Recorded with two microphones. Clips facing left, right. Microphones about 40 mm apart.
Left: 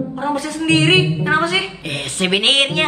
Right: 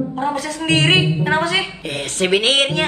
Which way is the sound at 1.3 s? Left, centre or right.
Centre.